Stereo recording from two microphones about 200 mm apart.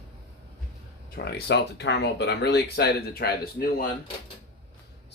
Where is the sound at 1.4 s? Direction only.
60° left (ahead or behind).